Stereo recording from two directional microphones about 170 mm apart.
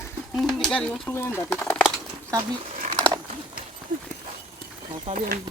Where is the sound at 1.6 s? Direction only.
5° left (ahead or behind).